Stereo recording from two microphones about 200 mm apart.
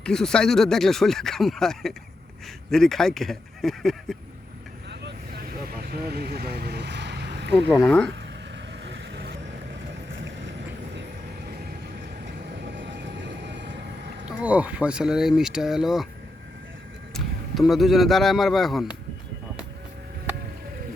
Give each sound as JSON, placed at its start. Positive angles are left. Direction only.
{"t": 0.0, "sound": "speech", "side_deg": 5}
{"t": 5.7, "sound": "vehicle", "side_deg": -55}
{"t": 7.8, "sound": "speech", "side_deg": 5}
{"t": 8.8, "sound": "vehicle", "side_deg": -60}
{"t": 12.7, "sound": "train", "side_deg": -60}
{"t": 14.3, "sound": "speech", "side_deg": -5}
{"t": 17.2, "sound": "speech", "side_deg": 0}